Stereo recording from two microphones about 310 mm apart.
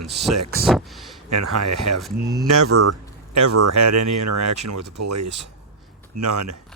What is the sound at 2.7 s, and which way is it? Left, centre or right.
Speech, right.